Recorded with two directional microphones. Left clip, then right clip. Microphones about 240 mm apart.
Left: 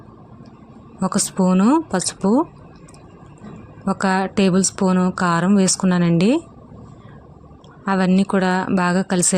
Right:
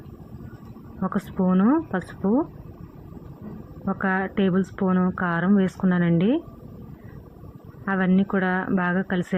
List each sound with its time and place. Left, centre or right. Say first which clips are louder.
0.9 s speech: left 6 dB; left
3.8 s a woman's voice: left 5 dB; left
7.9 s a woman's voice: left 5 dB; left